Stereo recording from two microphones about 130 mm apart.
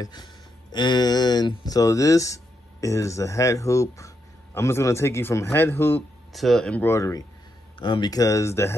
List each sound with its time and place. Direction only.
0.0 s speech: 35° left (ahead or behind); by 6.0 s 15° left (ahead or behind)
6.3 s speech: centre (ahead or behind)
6.9 s speech: 25° left (ahead or behind)
7.8 s speech: 35° left (ahead or behind); by 8.7 s 20° left (ahead or behind)